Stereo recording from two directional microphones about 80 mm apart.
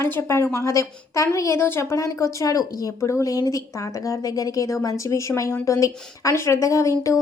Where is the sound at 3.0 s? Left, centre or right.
Left.